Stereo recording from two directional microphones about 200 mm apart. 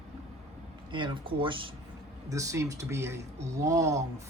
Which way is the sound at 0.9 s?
25° right (ahead or behind).